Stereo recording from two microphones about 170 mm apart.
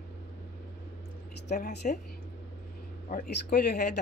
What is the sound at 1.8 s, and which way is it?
Speech, 50° left (ahead or behind).